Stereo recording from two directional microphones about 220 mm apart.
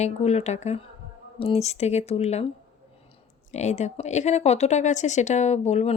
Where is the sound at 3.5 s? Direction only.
30° left (ahead or behind).